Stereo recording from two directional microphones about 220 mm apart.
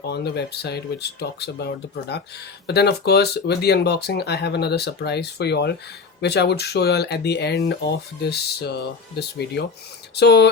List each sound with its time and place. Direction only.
0.0 s speech: 50° left (ahead or behind)